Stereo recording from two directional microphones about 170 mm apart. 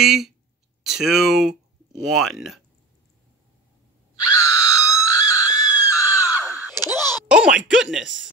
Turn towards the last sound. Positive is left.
turn(degrees=-5)  # may be behind; listen again after turning